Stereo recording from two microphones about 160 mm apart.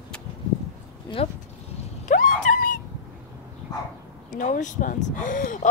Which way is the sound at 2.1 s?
55° left (ahead or behind).